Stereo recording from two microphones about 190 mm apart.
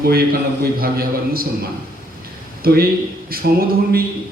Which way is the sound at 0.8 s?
50° right (ahead or behind).